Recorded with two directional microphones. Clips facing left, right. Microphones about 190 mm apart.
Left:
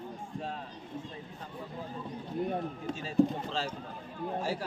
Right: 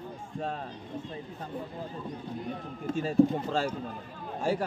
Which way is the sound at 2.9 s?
50° right (ahead or behind).